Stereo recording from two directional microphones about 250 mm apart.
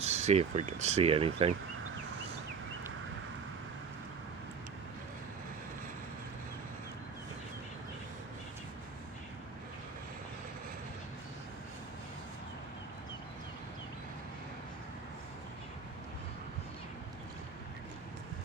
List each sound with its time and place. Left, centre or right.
0.0 s speech: right